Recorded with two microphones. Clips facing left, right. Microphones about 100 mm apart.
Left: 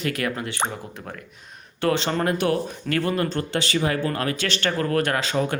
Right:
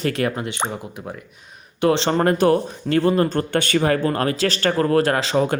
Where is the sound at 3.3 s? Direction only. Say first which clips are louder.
Right 5 dB; 50° right (ahead or behind).